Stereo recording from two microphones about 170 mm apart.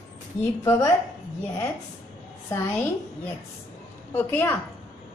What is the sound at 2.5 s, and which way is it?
Speech, 15° left (ahead or behind).